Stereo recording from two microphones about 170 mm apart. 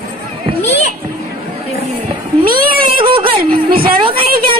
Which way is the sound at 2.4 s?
55° right (ahead or behind).